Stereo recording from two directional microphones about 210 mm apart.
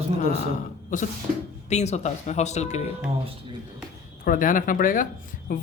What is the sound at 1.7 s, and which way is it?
A man's voice, 30° left (ahead or behind).